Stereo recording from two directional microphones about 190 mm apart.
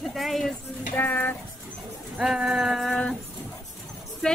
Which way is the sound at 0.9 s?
10° left (ahead or behind).